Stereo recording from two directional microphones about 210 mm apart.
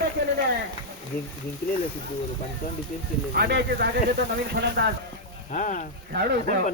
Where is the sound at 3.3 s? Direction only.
50° right (ahead or behind).